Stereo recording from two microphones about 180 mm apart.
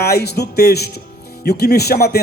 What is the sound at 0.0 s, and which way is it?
Speech, 65° left (ahead or behind).